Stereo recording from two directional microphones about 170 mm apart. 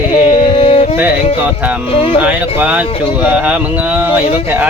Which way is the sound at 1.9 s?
35° left (ahead or behind).